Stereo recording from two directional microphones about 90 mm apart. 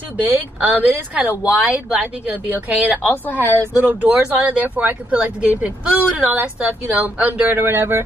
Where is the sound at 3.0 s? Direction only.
20° left (ahead or behind).